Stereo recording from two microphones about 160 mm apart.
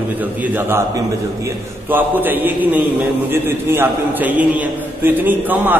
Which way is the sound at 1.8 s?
10° right (ahead or behind).